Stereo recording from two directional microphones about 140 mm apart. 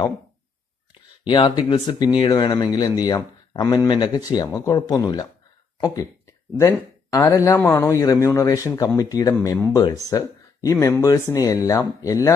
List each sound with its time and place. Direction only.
1.2 s speech: 35° left (ahead or behind)
6.6 s speech: 25° left (ahead or behind)